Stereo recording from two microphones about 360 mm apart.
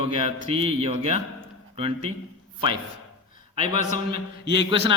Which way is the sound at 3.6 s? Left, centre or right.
Left.